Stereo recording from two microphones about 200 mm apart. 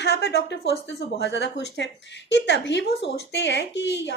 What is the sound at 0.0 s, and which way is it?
Speech, 55° left (ahead or behind).